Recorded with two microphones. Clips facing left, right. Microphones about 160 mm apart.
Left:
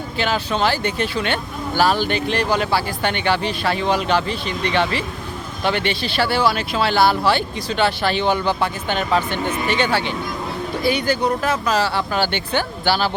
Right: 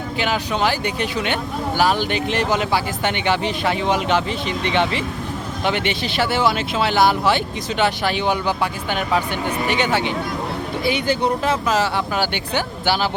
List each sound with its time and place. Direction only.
0.2 s speech: 15° right (ahead or behind)